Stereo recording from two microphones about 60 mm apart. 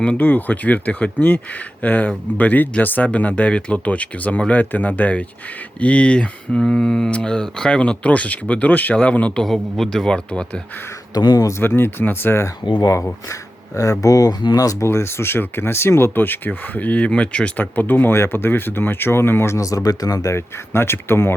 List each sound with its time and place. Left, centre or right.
0.0 s speech: left
9.4 s speech: centre
11.1 s speech: left
11.5 s speech: left
12.8 s speech: left
14.8 s speech: left; by 17.5 s centre
17.6 s speech: left
19.5 s speech: left
20.3 s speech: left